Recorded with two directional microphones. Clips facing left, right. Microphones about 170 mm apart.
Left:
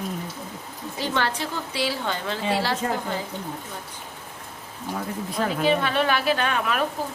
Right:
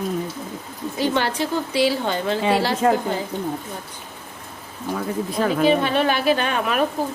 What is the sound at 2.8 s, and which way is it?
Speech, 80° right.